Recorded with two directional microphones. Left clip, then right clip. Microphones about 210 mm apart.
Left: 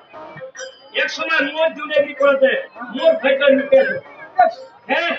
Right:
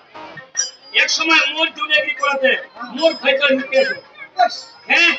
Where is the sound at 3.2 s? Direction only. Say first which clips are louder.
Left 1 dB; 55° left (ahead or behind).